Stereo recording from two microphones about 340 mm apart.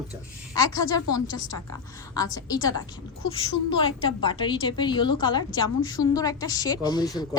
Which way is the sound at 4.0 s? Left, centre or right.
Centre.